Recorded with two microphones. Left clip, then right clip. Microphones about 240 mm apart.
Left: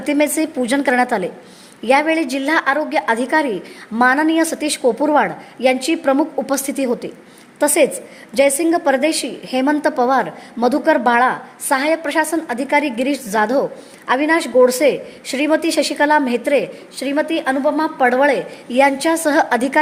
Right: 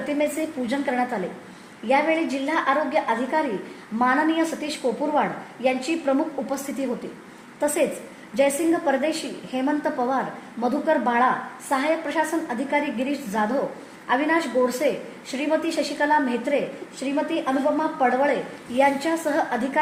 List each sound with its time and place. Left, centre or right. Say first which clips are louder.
0.1 s a woman's voice: left 9 dB; left
8.4 s a woman's voice: left 6 dB; left